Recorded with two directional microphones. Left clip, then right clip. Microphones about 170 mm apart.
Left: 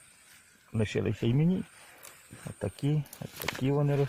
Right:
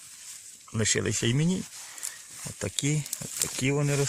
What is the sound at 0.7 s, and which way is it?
Speech, 15° right (ahead or behind).